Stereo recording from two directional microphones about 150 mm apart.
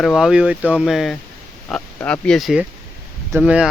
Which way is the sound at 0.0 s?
Centre (ahead or behind).